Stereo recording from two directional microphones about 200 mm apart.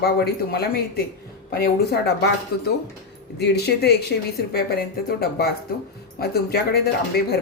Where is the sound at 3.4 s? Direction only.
55° left (ahead or behind).